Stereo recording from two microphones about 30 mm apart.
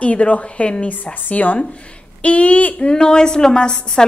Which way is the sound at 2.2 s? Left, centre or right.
Left.